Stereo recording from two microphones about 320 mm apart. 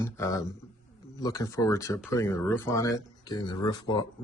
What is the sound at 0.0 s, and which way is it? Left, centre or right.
Speech, centre.